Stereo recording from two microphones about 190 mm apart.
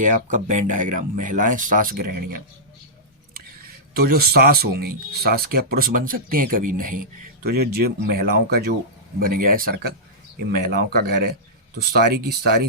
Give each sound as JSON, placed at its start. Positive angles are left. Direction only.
{"t": 0.0, "sound": "speech", "side_deg": -40}
{"t": 3.9, "sound": "speech", "side_deg": -55}